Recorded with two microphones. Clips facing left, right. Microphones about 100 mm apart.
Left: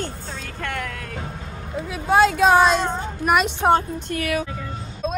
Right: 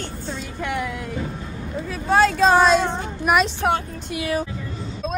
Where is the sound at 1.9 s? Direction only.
15° left (ahead or behind).